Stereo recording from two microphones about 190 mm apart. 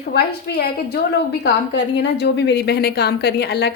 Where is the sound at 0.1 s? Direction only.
55° left (ahead or behind).